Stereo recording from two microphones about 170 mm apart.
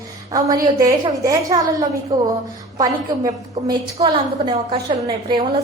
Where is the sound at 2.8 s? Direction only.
25° right (ahead or behind).